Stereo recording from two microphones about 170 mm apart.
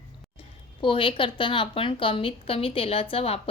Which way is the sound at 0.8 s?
30° left (ahead or behind).